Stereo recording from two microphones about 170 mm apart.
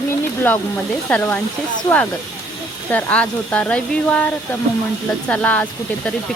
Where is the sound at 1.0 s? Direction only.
10° left (ahead or behind).